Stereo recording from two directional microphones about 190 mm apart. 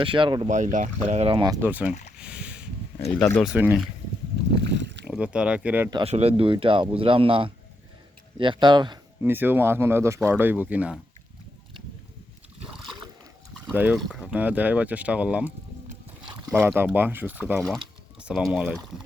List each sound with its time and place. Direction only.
0.0 s speech: 25° right (ahead or behind)
0.4 s speech: 40° right (ahead or behind)
1.5 s speech: 10° right (ahead or behind)
2.1 s a sound: 5° right (ahead or behind)
3.2 s speech: 10° left (ahead or behind)
3.4 s speech: 10° right (ahead or behind)
4.5 s rowboat: 65° right (ahead or behind)
5.0 s speech: 5° right (ahead or behind)
5.9 s speech: 30° right (ahead or behind)
9.2 s speech: 10° right (ahead or behind)
12.6 s a sound: centre (ahead or behind)
13.7 s speech: 5° right (ahead or behind)